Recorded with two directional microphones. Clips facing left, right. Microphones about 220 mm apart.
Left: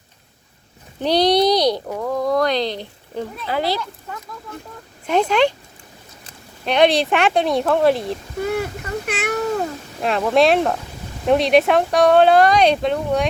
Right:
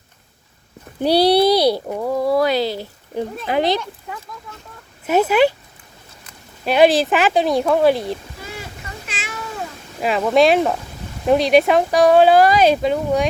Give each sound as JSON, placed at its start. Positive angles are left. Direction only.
{"t": 0.9, "sound": "speech", "side_deg": -10}
{"t": 3.4, "sound": "speech", "side_deg": -20}
{"t": 5.0, "sound": "speech", "side_deg": -5}
{"t": 6.7, "sound": "speech", "side_deg": -5}
{"t": 9.0, "sound": "cat", "side_deg": 60}
{"t": 10.0, "sound": "speech", "side_deg": -5}